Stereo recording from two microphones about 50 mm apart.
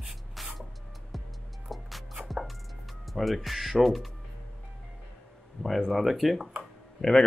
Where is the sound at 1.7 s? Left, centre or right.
Centre.